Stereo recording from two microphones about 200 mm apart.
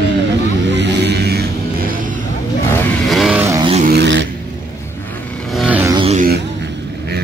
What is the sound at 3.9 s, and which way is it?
Vehicle, 60° right (ahead or behind).